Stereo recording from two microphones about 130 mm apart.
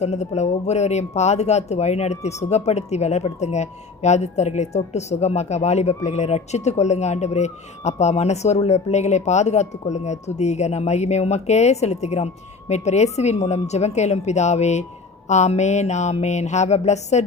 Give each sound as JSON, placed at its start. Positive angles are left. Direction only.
{"t": 0.0, "sound": "speech", "side_deg": 60}